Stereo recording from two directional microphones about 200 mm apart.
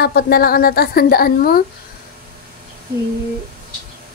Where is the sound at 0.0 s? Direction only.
50° left (ahead or behind).